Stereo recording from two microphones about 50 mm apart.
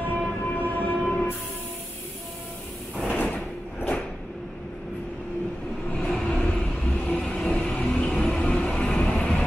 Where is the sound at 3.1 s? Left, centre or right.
Left.